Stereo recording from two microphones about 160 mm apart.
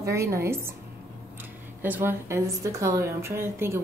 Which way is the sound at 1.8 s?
15° right (ahead or behind).